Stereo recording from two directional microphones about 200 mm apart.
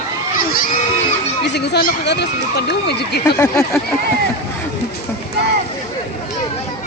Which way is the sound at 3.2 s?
15° left (ahead or behind).